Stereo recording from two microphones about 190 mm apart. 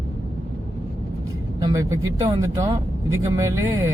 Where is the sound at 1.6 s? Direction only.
15° right (ahead or behind).